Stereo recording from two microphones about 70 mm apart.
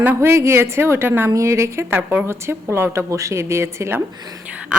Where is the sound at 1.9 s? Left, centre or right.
Right.